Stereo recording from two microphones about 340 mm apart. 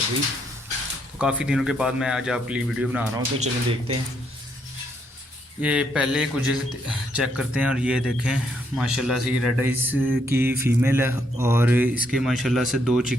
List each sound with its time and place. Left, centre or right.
1.2 s speech: centre
3.2 s speech: centre
5.6 s speech: centre